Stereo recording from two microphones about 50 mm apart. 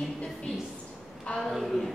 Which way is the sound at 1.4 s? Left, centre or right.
Centre.